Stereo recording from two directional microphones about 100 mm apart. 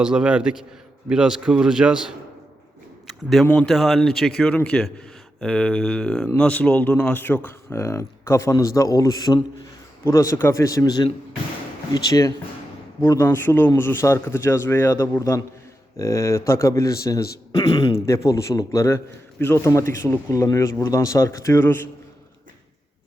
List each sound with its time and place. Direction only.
0.0 s speech: 10° right (ahead or behind)
3.1 s speech: centre (ahead or behind)
3.4 s speech: 25° left (ahead or behind)
3.7 s a man's voice: centre (ahead or behind); by 17.2 s 30° left (ahead or behind)
17.5 s speech: 40° left (ahead or behind)
18.0 s speech: 30° left (ahead or behind)